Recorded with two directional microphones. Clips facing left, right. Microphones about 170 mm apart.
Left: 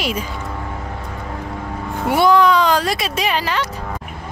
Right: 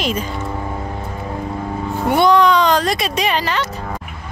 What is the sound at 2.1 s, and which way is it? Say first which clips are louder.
Speech: right 1 dB; 5° left (ahead or behind).